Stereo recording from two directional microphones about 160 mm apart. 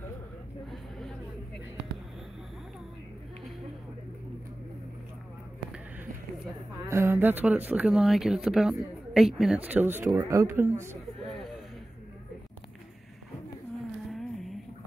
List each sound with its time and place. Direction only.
0.7 s a sound: centre (ahead or behind)
6.9 s speech: 15° right (ahead or behind)
14.1 s music: centre (ahead or behind)